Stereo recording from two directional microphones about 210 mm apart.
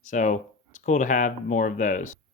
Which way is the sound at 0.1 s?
35° left (ahead or behind).